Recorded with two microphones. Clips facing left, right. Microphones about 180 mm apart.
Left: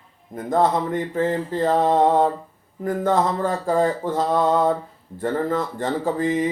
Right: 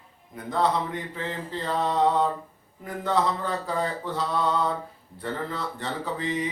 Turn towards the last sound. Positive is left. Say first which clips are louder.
# left 8 dB
turn(degrees=45)  # may be behind; listen again after turning